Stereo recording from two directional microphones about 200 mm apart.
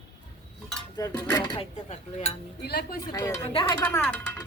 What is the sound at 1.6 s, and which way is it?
Speech, 35° left (ahead or behind).